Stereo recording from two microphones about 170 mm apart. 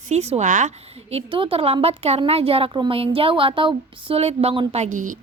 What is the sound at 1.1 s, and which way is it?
A woman's voice, 30° right (ahead or behind).